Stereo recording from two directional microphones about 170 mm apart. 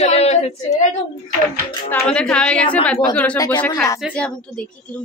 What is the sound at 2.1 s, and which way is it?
A woman's voice, 5° left (ahead or behind).